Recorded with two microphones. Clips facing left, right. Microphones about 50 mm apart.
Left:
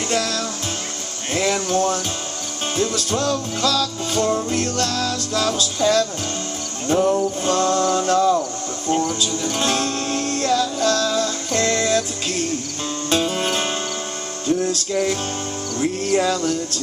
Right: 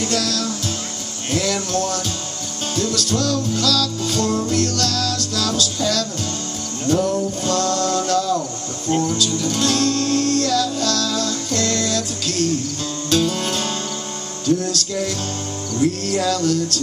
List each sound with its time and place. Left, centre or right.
0.0 s music: left